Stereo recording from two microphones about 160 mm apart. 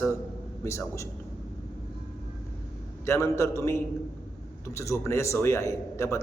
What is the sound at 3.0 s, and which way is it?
A man's voice, 15° left (ahead or behind).